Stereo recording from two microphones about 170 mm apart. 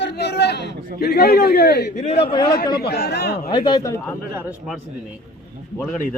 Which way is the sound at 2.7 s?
70° left (ahead or behind).